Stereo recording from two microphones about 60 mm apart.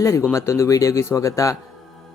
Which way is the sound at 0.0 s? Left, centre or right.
Left.